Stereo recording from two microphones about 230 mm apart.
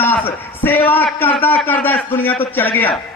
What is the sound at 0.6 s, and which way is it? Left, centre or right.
A man's voice, centre.